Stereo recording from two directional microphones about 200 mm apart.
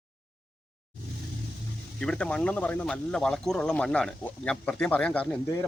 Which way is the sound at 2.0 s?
5° left (ahead or behind).